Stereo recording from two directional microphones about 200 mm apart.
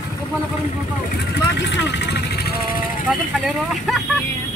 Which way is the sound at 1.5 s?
60° left (ahead or behind).